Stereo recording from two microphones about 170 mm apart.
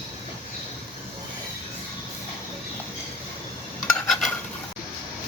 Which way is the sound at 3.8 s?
Centre (ahead or behind).